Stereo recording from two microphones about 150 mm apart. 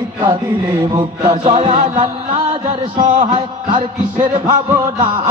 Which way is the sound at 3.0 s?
30° right (ahead or behind).